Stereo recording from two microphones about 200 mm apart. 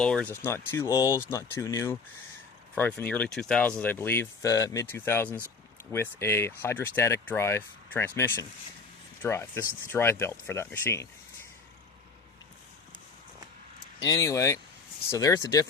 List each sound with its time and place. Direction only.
0.0 s speech: 5° left (ahead or behind)
14.0 s speech: 15° left (ahead or behind)